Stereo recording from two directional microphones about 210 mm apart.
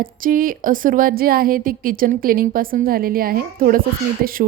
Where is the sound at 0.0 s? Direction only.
40° right (ahead or behind).